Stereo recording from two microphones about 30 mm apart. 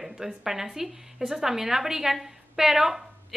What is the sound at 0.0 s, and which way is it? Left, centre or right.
A woman's voice, centre.